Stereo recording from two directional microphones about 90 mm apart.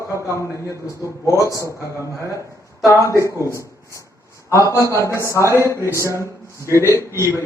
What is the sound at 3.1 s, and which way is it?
Speech, 35° right (ahead or behind).